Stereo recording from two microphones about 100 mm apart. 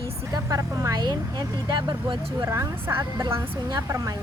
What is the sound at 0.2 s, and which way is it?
Speech, 30° right (ahead or behind).